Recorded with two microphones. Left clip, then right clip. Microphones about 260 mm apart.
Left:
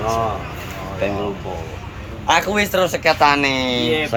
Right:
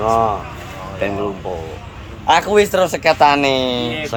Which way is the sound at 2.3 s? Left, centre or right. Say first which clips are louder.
Right 4 dB; right.